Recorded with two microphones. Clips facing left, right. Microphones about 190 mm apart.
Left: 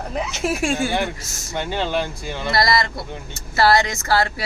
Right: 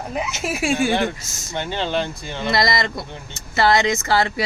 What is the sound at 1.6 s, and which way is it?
Speech, 10° left (ahead or behind).